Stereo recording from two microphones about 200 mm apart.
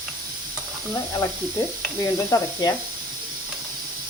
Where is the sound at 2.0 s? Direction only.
15° left (ahead or behind).